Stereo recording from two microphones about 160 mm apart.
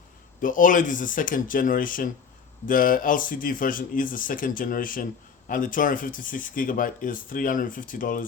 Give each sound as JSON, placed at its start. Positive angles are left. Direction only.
{"t": 0.4, "sound": "speech", "side_deg": 55}